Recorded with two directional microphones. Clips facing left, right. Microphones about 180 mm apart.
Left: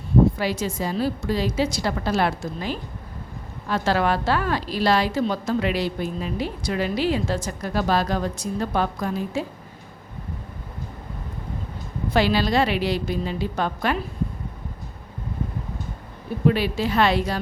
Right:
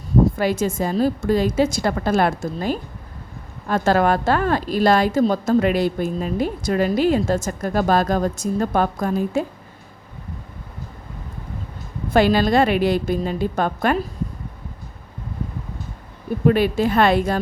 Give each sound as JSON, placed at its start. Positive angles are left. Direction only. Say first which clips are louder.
{"t": 0.3, "sound": "a woman's voice", "louder": "right 5 dB", "side_deg": -50}
{"t": 12.1, "sound": "a woman's voice", "louder": "right 5 dB", "side_deg": -50}
{"t": 16.5, "sound": "a woman's voice", "louder": "right 5 dB", "side_deg": -50}